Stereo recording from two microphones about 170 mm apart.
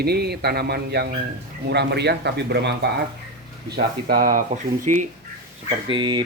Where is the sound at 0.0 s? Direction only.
70° right (ahead or behind).